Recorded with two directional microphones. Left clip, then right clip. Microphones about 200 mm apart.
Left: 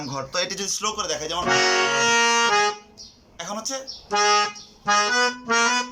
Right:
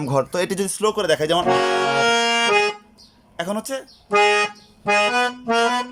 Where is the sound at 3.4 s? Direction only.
45° right (ahead or behind).